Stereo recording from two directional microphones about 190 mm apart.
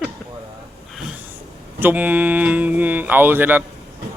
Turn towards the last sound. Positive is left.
turn(degrees=-10)  # may be behind; listen again after turning